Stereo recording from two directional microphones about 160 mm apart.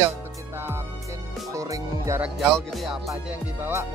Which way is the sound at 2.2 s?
Centre (ahead or behind).